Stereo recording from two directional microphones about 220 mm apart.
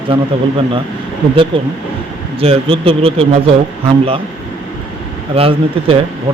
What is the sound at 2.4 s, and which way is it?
Speech, 25° right (ahead or behind).